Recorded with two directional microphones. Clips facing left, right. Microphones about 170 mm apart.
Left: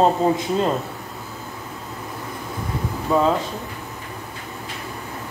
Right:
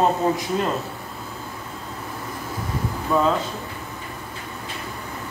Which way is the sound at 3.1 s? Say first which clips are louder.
Left 2 dB; 20° left (ahead or behind).